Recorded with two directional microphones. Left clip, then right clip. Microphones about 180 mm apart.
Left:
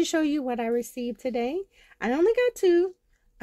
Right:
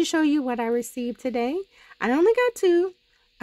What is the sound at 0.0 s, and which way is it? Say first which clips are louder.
Speech: right 3 dB; 20° right (ahead or behind).